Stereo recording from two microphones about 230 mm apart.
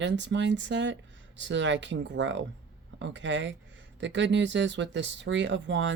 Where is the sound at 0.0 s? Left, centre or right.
Right.